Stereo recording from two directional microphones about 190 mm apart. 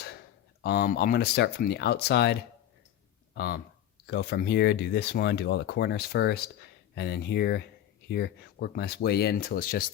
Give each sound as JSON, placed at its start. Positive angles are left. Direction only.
{"t": 0.6, "sound": "speech", "side_deg": 55}